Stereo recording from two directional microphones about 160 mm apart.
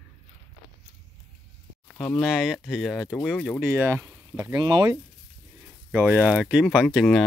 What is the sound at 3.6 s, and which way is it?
Speech, 15° right (ahead or behind).